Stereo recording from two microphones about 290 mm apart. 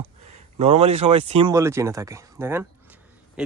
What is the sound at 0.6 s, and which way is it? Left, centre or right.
Speech, right.